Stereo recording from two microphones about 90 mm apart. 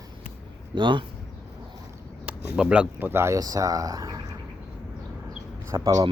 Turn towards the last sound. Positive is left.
turn(degrees=-40)  # may be behind; listen again after turning